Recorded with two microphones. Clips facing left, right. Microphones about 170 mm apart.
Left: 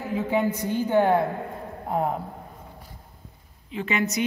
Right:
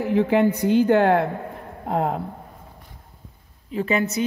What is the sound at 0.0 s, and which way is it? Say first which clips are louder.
A woman's voice: right 6 dB; 75° right (ahead or behind).